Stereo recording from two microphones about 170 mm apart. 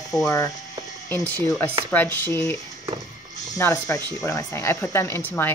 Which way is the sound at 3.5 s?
20° left (ahead or behind).